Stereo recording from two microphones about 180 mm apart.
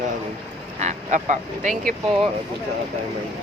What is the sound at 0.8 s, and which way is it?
Duck, 40° right (ahead or behind).